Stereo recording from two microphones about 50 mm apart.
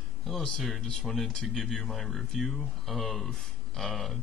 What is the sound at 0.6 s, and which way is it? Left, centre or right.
A man's voice, centre.